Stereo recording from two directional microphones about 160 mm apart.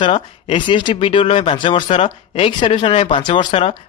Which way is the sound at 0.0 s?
30° left (ahead or behind).